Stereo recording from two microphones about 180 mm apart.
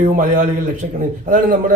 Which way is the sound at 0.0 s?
50° right (ahead or behind).